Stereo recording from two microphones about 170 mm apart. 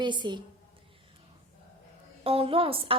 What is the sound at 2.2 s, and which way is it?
Speech, 35° right (ahead or behind).